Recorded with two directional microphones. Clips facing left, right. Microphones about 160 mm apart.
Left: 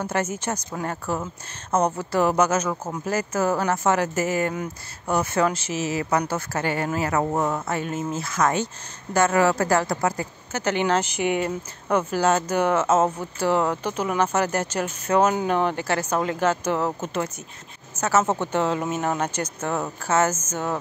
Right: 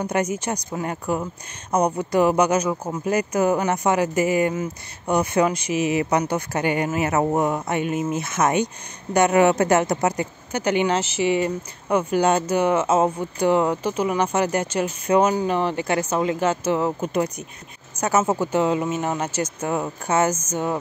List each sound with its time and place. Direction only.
0.0 s speech: 15° right (ahead or behind)
15.8 s speech: 10° right (ahead or behind)